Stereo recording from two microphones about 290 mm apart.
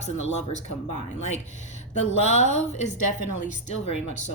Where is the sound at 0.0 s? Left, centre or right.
Left.